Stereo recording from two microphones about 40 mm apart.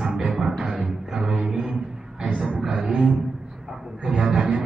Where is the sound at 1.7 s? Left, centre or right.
Right.